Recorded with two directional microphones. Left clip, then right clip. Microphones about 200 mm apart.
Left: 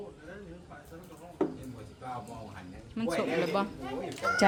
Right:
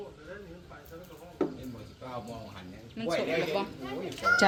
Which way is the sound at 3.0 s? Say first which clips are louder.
Left 1 dB; 55° left (ahead or behind).